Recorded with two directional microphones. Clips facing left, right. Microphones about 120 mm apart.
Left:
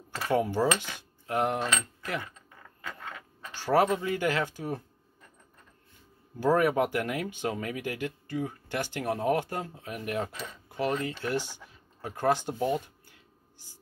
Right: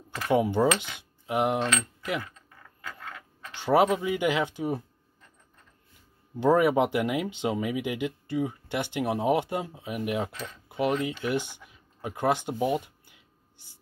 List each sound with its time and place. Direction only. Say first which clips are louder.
0.3 s speech: right 3 dB; 20° right (ahead or behind)
3.5 s speech: right 2 dB; 20° right (ahead or behind)
6.4 s speech: right 3 dB; 20° right (ahead or behind)
10.7 s a sound: right 3 dB; 15° right (ahead or behind)
11.2 s speech: right 2 dB; 15° right (ahead or behind)